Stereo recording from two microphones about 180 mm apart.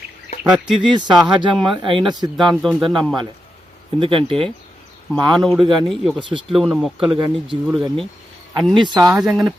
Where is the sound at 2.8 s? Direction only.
25° right (ahead or behind).